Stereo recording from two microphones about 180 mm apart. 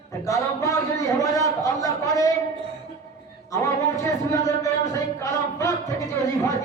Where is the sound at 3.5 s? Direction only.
15° left (ahead or behind).